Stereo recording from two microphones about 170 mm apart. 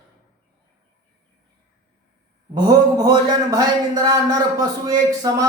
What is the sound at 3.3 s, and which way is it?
Speech, 20° right (ahead or behind).